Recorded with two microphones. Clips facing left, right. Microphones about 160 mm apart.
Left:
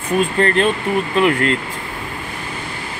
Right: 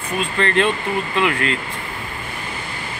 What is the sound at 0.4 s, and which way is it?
Speech, 40° left (ahead or behind).